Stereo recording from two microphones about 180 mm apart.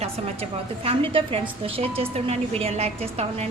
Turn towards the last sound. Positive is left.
turn(degrees=-35)  # may be behind; listen again after turning